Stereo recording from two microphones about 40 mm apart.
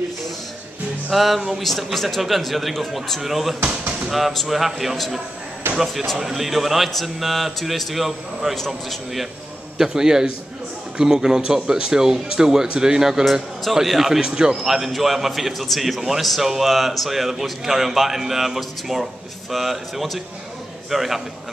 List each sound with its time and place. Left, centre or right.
1.1 s a man's voice: centre
6.1 s a man's voice: centre
8.5 s a man's voice: centre
9.8 s speech: centre
13.2 s a man's voice: centre
14.2 s speech: centre
14.6 s a man's voice: centre